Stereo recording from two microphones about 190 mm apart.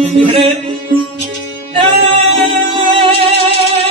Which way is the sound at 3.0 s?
30° right (ahead or behind).